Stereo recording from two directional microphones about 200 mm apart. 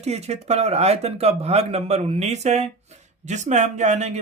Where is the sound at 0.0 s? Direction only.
35° right (ahead or behind).